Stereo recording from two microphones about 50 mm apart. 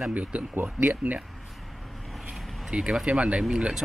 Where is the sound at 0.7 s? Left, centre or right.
Right.